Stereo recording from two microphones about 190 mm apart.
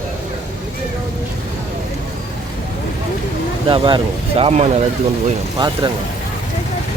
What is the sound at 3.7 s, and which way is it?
Speech, 25° right (ahead or behind).